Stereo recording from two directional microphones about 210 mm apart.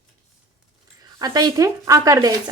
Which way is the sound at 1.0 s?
20° right (ahead or behind).